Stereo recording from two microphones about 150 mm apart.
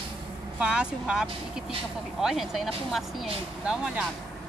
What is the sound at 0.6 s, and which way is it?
Speech, 5° right (ahead or behind).